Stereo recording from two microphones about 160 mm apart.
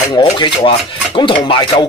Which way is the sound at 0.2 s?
30° left (ahead or behind).